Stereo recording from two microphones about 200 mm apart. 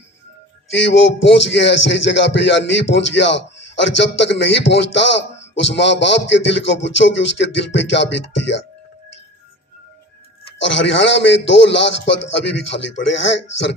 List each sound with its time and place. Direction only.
0.9 s music: 65° left (ahead or behind)
10.6 s music: 65° left (ahead or behind)